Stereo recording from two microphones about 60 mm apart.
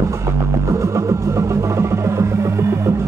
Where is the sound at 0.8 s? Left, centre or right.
Right.